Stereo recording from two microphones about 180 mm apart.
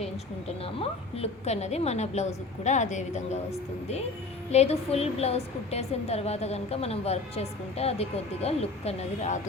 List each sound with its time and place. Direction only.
0.4 s a woman's voice: 35° left (ahead or behind)
4.5 s a woman's voice: 35° left (ahead or behind)